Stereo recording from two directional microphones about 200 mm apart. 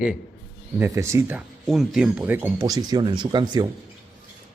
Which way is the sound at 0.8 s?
15° right (ahead or behind).